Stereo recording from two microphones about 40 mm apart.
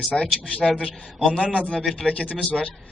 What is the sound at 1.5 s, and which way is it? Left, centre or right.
Speech, left.